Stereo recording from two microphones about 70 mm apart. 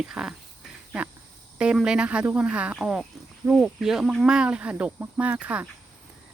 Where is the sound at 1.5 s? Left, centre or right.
Centre.